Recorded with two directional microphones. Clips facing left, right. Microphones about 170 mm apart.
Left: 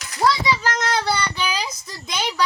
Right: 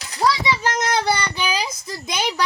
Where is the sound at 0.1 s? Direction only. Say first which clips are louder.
Even; 25° right (ahead or behind).